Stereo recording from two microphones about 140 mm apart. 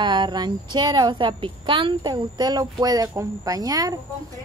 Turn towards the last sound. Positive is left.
turn(degrees=-25)  # may be behind; listen again after turning